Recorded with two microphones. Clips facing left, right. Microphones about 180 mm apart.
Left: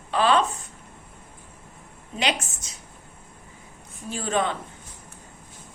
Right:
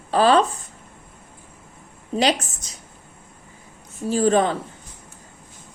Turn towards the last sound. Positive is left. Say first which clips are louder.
# right 8 dB
turn(degrees=-35)  # may be behind; listen again after turning